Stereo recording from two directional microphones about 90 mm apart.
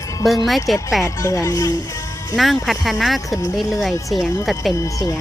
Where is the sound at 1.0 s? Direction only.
35° left (ahead or behind).